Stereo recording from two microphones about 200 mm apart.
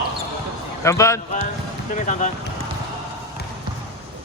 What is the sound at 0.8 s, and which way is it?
Speech, 15° left (ahead or behind).